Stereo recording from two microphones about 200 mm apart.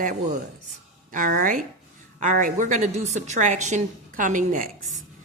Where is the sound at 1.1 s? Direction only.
40° right (ahead or behind).